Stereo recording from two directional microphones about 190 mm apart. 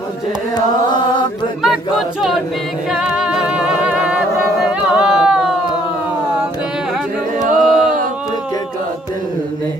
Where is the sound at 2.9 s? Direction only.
5° right (ahead or behind).